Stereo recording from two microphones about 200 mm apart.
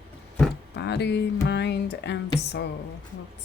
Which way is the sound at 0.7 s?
60° left (ahead or behind).